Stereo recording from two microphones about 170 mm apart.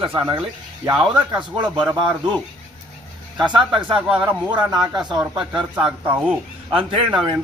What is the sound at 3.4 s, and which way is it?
Speech, 25° right (ahead or behind).